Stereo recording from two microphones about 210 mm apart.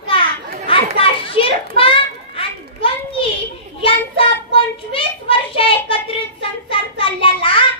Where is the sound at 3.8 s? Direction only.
25° left (ahead or behind).